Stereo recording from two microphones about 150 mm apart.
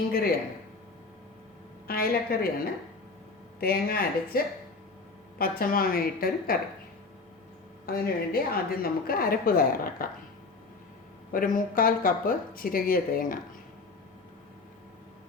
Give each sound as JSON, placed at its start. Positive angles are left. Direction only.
{"t": 0.1, "sound": "speech", "side_deg": 90}
{"t": 1.9, "sound": "a woman's voice", "side_deg": 85}
{"t": 3.6, "sound": "speech", "side_deg": 90}
{"t": 7.9, "sound": "a woman's voice", "side_deg": 90}
{"t": 11.3, "sound": "speech", "side_deg": 65}